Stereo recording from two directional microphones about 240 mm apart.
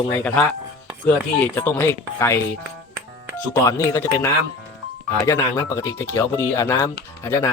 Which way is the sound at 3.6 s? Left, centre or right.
Centre.